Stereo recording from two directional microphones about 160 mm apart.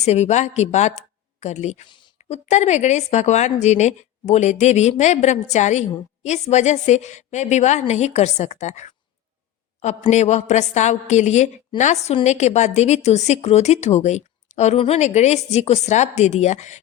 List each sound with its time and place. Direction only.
0.0 s a woman's voice: 45° left (ahead or behind)